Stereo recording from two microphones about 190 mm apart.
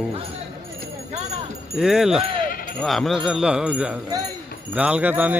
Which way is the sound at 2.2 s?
50° left (ahead or behind).